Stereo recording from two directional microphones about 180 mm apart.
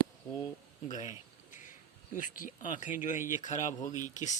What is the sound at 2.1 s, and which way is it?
Speech, 50° left (ahead or behind).